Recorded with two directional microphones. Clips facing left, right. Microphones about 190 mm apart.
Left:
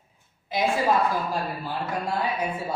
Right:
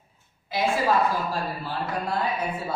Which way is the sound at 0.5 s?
20° left (ahead or behind).